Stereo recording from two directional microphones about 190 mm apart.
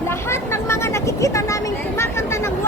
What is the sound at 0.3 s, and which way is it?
Vehicle, 15° left (ahead or behind).